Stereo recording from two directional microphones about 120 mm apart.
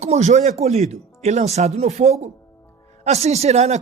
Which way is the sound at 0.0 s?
70° right (ahead or behind).